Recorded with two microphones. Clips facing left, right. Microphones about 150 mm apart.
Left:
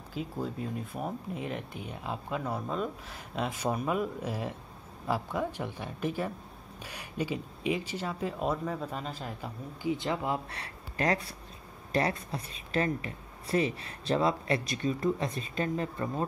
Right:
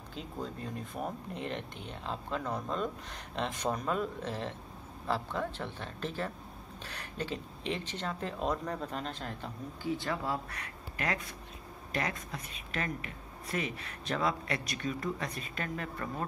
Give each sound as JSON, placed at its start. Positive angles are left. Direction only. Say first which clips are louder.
{"t": 0.1, "sound": "speech", "louder": "left 5 dB", "side_deg": 5}
{"t": 10.6, "sound": "speech", "louder": "left 6 dB", "side_deg": 35}